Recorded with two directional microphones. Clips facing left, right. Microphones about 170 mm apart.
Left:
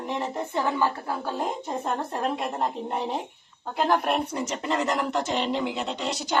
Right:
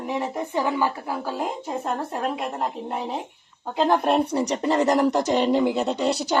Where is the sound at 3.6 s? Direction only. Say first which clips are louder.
Right 3 dB; 15° right (ahead or behind); by 6.3 s 35° right (ahead or behind).